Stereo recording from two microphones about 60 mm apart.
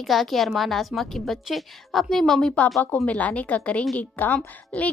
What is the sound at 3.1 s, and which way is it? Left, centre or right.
A woman's voice, left.